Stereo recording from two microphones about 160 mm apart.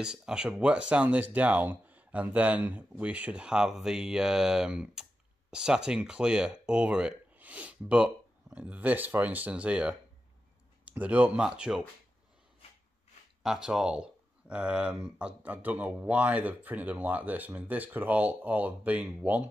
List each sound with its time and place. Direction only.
0.0 s speech: 5° right (ahead or behind)
13.4 s speech: 5° right (ahead or behind)